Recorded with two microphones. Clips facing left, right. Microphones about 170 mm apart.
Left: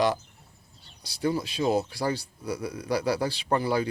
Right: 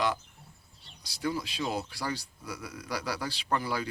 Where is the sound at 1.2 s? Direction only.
30° left (ahead or behind).